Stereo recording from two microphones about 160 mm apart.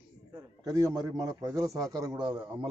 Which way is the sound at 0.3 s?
20° right (ahead or behind).